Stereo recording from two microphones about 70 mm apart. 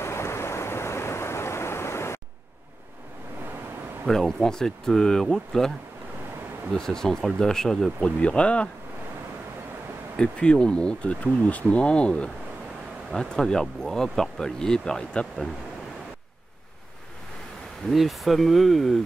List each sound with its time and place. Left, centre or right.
0.0 s a sound: left
4.1 s speech: centre
6.7 s speech: centre
8.0 s speech: centre
10.1 s speech: centre
17.8 s speech: centre